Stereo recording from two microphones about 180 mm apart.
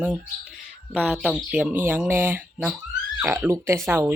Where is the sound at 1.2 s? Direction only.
5° left (ahead or behind).